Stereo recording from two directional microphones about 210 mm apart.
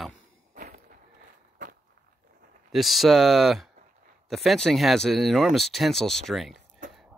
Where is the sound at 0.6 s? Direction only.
35° right (ahead or behind).